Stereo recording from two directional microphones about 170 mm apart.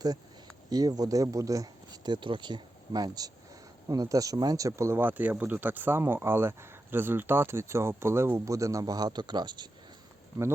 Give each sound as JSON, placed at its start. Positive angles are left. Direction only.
{"t": 0.7, "sound": "speech", "side_deg": -20}